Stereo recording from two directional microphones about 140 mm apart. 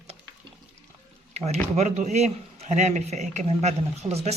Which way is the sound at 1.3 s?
50° right (ahead or behind).